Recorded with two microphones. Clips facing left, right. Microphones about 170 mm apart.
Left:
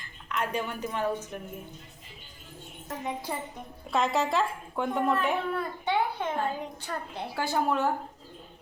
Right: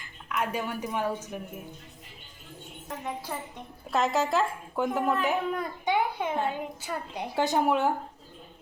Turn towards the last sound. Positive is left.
turn(degrees=-15)  # may be behind; listen again after turning